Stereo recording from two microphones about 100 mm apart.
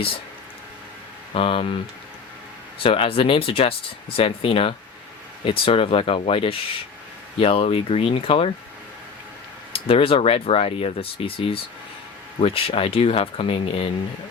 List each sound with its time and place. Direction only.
1.3 s speech: 65° left (ahead or behind)
9.7 s speech: 70° left (ahead or behind)